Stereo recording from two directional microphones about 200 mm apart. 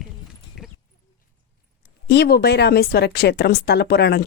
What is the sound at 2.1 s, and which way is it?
Speech, 55° left (ahead or behind).